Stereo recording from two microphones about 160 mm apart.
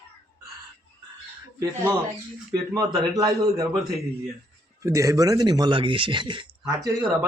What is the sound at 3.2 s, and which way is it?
Speech, 25° right (ahead or behind).